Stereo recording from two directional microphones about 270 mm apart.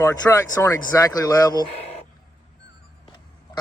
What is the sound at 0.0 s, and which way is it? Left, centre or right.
Speech, centre.